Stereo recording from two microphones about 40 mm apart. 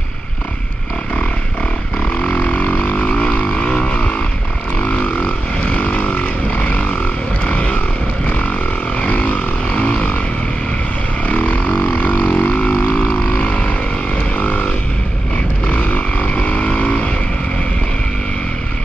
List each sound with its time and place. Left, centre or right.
2.2 s didgeridoo: left
4.8 s vehicle: left
11.2 s didgeridoo: left
13.4 s vehicle: left
14.3 s a sound: left
15.6 s vehicle: left